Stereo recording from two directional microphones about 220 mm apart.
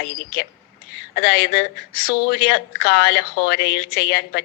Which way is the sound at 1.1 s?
45° left (ahead or behind).